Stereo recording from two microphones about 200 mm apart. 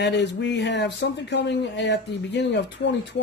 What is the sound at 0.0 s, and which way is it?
Speech, 60° left (ahead or behind).